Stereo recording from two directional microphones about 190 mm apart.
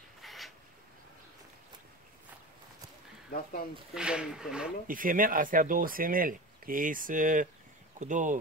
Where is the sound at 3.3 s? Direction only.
50° left (ahead or behind).